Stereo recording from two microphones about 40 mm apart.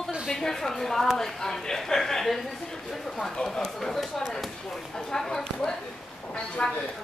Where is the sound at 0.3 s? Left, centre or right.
Centre.